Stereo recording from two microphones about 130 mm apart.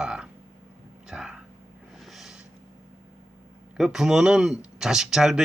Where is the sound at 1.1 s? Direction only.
5° right (ahead or behind).